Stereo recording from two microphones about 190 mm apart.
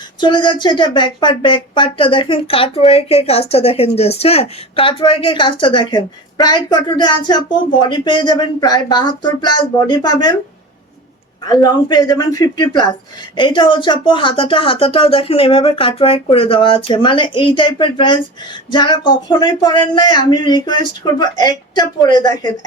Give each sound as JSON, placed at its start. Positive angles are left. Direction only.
{"t": 0.2, "sound": "speech", "side_deg": 25}
{"t": 11.4, "sound": "speech", "side_deg": 20}